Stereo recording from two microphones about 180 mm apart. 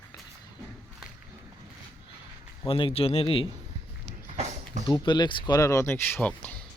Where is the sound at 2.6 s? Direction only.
30° left (ahead or behind).